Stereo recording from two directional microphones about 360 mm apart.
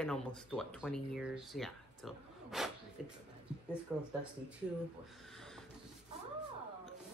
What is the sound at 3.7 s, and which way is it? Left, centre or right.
Speech, centre.